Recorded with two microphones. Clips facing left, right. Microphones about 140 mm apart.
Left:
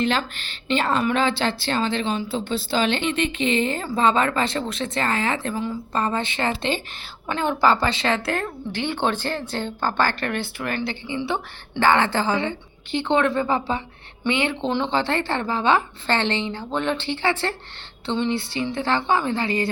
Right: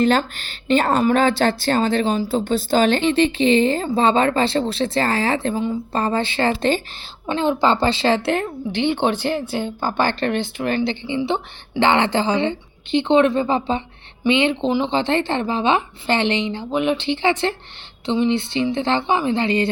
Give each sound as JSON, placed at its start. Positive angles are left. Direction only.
{"t": 0.0, "sound": "a woman's voice", "side_deg": -40}
{"t": 7.3, "sound": "a woman's voice", "side_deg": -20}
{"t": 10.1, "sound": "a woman's voice", "side_deg": -25}